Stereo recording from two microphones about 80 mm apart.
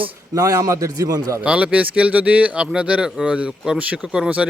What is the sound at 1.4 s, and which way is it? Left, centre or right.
Speech, centre.